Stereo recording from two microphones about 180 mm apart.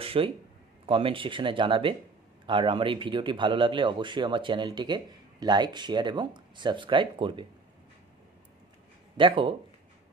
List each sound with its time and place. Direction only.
0.0 s a sound: 30° right (ahead or behind)
0.8 s speech: 30° right (ahead or behind)
9.1 s speech: 25° right (ahead or behind)